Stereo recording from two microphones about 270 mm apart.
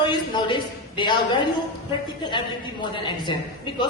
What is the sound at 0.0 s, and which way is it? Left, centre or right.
A man's voice, centre.